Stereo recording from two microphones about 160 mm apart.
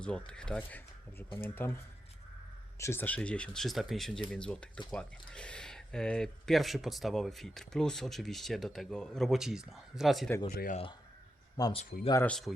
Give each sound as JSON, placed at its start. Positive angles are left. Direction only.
{"t": 0.0, "sound": "speech", "side_deg": 5}
{"t": 2.7, "sound": "speech", "side_deg": 15}
{"t": 10.5, "sound": "speech", "side_deg": 70}
{"t": 11.6, "sound": "speech", "side_deg": 25}
{"t": 12.2, "sound": "speech", "side_deg": 5}